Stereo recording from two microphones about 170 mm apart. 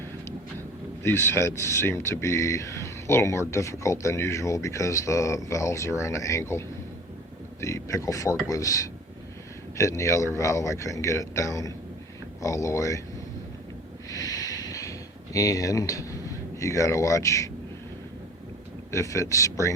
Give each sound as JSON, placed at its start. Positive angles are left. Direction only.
{"t": 1.0, "sound": "a man's voice", "side_deg": 15}
{"t": 14.1, "sound": "a sound", "side_deg": 20}
{"t": 16.6, "sound": "a man's voice", "side_deg": 20}
{"t": 18.9, "sound": "a man's voice", "side_deg": 20}